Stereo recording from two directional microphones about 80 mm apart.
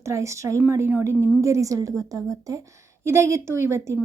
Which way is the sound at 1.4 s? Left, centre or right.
Right.